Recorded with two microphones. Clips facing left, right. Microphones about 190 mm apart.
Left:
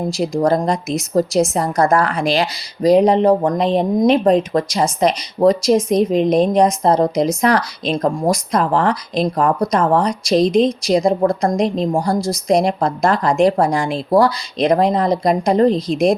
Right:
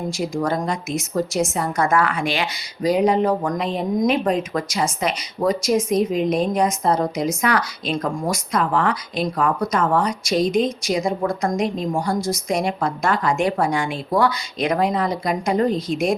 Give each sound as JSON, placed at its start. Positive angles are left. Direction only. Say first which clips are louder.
{"t": 0.1, "sound": "a woman's voice", "louder": "left 7 dB", "side_deg": 35}